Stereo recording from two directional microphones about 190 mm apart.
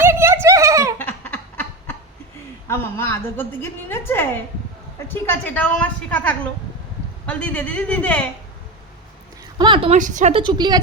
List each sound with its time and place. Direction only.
0.0 s a sound: 10° right (ahead or behind)
0.9 s a sound: 10° left (ahead or behind)
2.6 s a woman's voice: 15° left (ahead or behind)
9.6 s a woman's voice: 25° right (ahead or behind)
10.0 s a woman's voice: 40° right (ahead or behind)
10.4 s a woman's voice: 25° right (ahead or behind)